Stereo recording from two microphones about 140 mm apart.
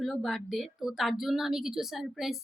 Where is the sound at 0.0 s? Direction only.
Centre (ahead or behind).